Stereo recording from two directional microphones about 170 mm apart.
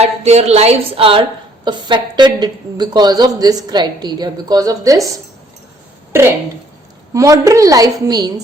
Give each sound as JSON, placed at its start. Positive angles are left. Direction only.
{"t": 0.0, "sound": "a woman's voice", "side_deg": -40}
{"t": 7.1, "sound": "a woman's voice", "side_deg": -20}